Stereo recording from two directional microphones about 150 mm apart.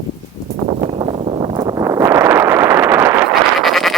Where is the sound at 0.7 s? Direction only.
40° right (ahead or behind); by 3.2 s 15° right (ahead or behind).